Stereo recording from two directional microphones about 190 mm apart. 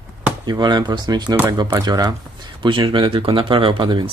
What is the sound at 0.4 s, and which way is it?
Speech, 20° right (ahead or behind).